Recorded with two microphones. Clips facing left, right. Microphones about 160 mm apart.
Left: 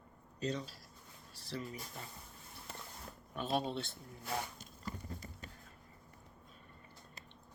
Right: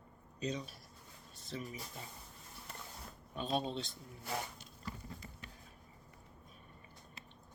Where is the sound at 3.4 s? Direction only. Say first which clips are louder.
Left 1 dB; 20° right (ahead or behind).